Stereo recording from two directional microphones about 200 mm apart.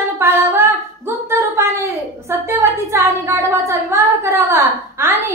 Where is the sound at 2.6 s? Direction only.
15° right (ahead or behind).